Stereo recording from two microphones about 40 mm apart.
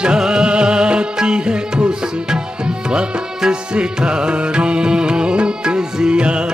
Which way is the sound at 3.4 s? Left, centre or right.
Right.